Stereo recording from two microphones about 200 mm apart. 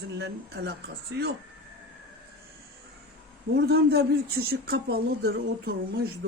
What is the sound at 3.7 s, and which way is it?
Speech, 50° right (ahead or behind).